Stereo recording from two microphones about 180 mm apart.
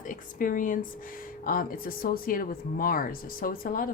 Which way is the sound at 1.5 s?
50° left (ahead or behind).